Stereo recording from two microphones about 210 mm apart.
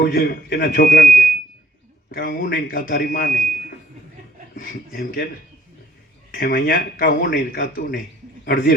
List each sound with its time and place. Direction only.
0.0 s speech: 45° left (ahead or behind)
4.5 s speech: 40° left (ahead or behind)
6.3 s speech: 45° left (ahead or behind)